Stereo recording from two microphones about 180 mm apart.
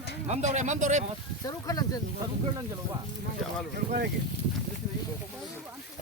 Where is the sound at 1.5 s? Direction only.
20° left (ahead or behind).